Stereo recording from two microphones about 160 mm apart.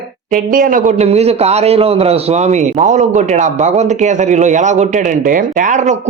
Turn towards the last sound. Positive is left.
turn(degrees=-50)  # may be behind; listen again after turning